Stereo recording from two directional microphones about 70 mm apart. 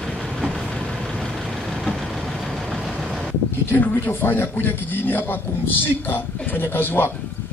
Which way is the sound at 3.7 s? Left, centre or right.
Left.